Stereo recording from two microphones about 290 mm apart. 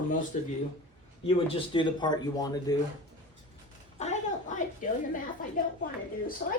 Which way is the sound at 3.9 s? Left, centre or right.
Left.